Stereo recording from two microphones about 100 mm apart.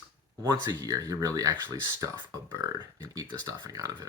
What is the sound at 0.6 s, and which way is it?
Speech, 35° right (ahead or behind).